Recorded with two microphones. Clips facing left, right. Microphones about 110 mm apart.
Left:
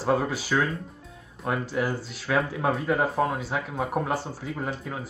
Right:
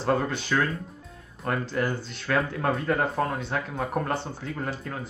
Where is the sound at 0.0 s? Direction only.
5° left (ahead or behind).